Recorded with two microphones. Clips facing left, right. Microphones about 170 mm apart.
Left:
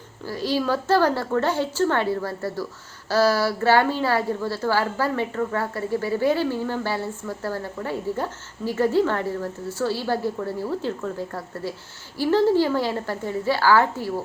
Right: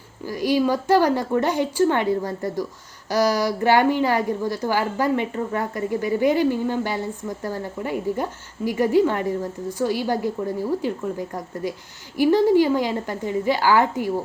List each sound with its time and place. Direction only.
0.3 s a woman's voice: 15° right (ahead or behind)